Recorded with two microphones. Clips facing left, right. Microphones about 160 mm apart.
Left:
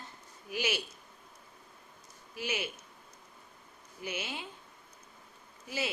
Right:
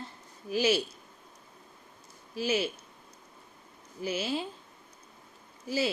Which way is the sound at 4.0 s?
30° right (ahead or behind).